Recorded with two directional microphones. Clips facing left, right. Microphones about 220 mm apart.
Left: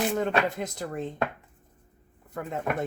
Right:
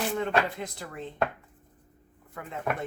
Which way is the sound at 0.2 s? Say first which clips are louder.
Left 2 dB; 45° left (ahead or behind).